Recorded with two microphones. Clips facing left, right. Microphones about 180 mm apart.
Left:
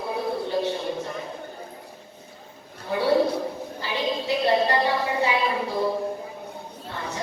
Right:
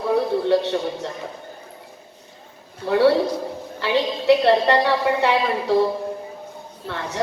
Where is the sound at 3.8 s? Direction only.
70° right (ahead or behind).